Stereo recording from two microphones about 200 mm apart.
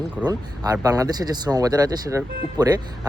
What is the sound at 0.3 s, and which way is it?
Speech, 20° right (ahead or behind).